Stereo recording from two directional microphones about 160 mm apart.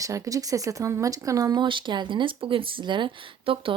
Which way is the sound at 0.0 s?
20° right (ahead or behind).